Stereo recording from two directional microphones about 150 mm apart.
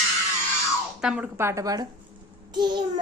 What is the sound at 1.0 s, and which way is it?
Speech, 5° right (ahead or behind).